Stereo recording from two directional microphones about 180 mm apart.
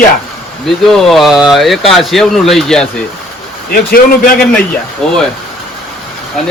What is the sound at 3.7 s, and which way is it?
Speech, 55° left (ahead or behind).